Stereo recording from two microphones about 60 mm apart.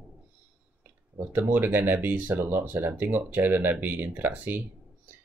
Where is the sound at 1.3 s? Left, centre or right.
Right.